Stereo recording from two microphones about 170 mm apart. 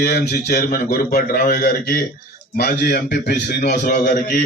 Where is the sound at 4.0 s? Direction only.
50° left (ahead or behind).